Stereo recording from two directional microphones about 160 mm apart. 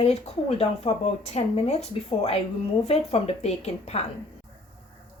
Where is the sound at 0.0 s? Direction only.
40° left (ahead or behind).